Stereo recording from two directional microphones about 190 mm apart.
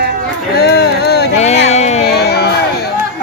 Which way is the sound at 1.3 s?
35° left (ahead or behind).